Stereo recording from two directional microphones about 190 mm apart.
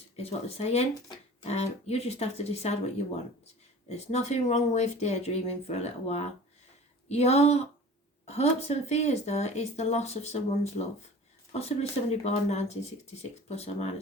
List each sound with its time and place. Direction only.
0.2 s speech: 30° left (ahead or behind)
3.8 s speech: 35° left (ahead or behind)